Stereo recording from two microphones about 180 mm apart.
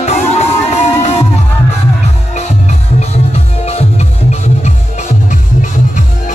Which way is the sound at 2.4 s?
40° left (ahead or behind).